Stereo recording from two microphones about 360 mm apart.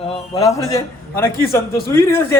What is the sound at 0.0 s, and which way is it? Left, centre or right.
A man's voice, centre.